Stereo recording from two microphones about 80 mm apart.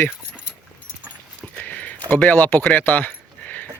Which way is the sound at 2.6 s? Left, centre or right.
Centre.